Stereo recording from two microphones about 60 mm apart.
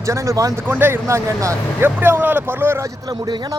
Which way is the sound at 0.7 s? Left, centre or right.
Right.